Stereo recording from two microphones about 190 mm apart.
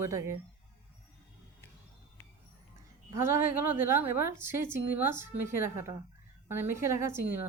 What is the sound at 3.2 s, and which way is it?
Speech, 15° right (ahead or behind).